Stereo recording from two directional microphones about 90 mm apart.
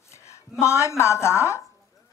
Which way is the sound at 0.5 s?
30° left (ahead or behind).